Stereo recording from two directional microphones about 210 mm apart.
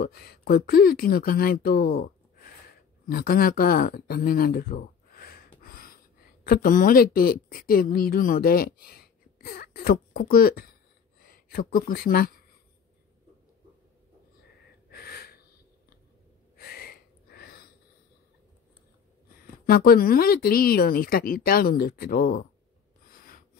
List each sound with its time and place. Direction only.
0.0 s speech: 45° left (ahead or behind)
3.1 s a woman's voice: 45° left (ahead or behind)
14.9 s gasp: 45° left (ahead or behind)
16.5 s a sound: 45° left (ahead or behind)
19.6 s speech: 45° left (ahead or behind)
23.0 s a sound: 45° left (ahead or behind)